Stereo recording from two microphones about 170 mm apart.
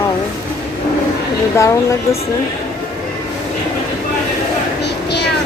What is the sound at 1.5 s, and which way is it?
Speech, 15° left (ahead or behind).